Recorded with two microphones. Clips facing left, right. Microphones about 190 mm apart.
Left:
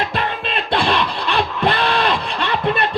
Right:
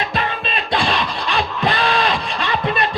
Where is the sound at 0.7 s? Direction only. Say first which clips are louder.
Left 2 dB; 60° left (ahead or behind).